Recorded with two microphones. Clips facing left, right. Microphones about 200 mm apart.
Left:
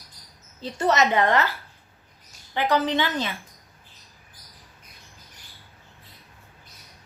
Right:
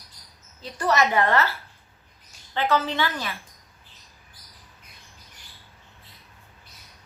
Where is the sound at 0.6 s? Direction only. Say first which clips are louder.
Left 1 dB; 20° left (ahead or behind).